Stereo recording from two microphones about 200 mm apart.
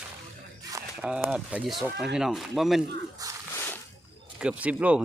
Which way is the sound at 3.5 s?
10° left (ahead or behind).